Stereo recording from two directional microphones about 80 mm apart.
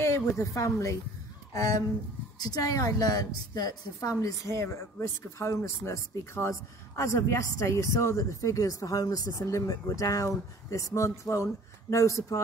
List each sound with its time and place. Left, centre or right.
0.0 s a woman's voice: left